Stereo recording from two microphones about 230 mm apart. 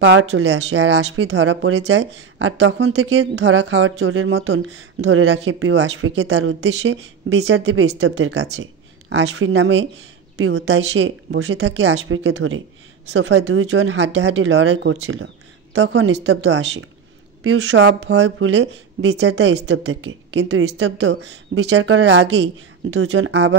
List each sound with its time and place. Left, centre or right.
0.0 s speech: right
21.6 s speech: right